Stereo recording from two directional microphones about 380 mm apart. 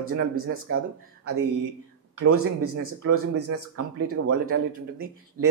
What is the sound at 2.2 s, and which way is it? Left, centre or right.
Speech, right.